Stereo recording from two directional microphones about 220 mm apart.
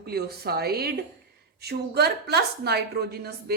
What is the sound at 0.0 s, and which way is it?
A woman's voice, 45° right (ahead or behind).